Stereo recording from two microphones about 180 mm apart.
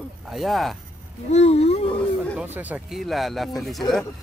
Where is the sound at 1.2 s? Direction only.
35° left (ahead or behind).